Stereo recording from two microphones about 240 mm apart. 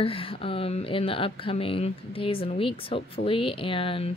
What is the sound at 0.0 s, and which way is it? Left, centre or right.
Music, left.